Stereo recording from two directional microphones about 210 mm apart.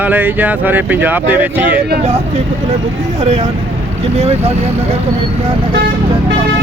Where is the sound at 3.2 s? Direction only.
30° right (ahead or behind).